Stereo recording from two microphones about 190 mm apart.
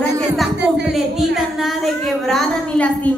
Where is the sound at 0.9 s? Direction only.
Centre (ahead or behind).